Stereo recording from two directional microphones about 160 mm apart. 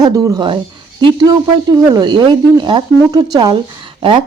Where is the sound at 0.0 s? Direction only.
25° right (ahead or behind).